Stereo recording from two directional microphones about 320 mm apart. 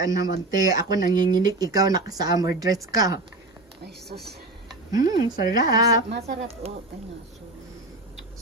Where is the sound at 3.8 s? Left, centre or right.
Right.